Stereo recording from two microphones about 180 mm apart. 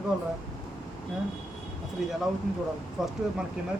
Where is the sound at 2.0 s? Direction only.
Centre (ahead or behind).